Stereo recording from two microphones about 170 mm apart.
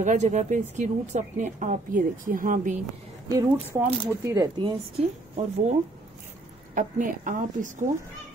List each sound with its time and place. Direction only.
0.0 s a woman's voice: 45° right (ahead or behind)
3.3 s speech: 20° right (ahead or behind)
6.7 s a woman's voice: 50° right (ahead or behind)